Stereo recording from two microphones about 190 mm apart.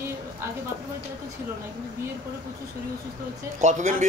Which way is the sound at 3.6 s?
40° right (ahead or behind).